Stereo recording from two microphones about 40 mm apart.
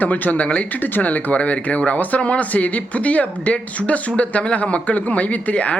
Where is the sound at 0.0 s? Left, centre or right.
Left.